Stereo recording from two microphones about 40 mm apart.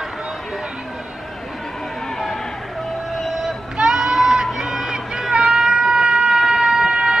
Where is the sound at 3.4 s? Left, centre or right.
Centre.